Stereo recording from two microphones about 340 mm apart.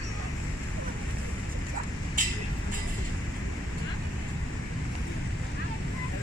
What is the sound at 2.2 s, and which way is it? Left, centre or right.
Vehicle, right.